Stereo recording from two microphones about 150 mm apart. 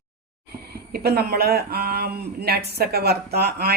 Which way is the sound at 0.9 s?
90° right.